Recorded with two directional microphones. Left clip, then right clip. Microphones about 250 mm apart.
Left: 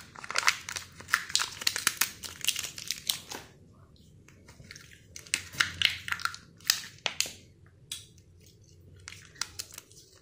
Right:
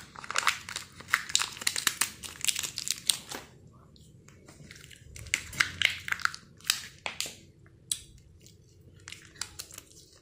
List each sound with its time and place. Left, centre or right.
0.1 s crumpling: centre
2.3 s crumpling: centre
2.9 s crumpling: right
4.6 s a sound: centre
6.2 s a sound: centre
9.0 s crumpling: centre